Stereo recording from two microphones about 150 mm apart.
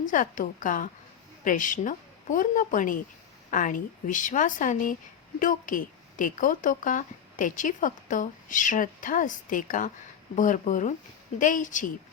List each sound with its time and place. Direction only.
0.0 s speech: 60° left (ahead or behind)